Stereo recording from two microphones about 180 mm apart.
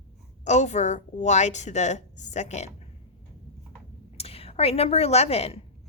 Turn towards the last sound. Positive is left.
turn(degrees=35)  # may be behind; listen again after turning